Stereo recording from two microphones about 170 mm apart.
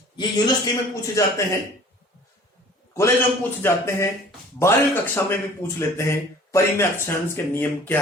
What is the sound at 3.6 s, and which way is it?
Speech, 15° left (ahead or behind).